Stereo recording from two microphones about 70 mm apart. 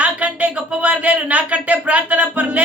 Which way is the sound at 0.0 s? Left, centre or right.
Right.